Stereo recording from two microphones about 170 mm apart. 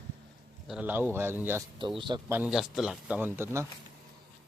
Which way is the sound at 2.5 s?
Centre (ahead or behind).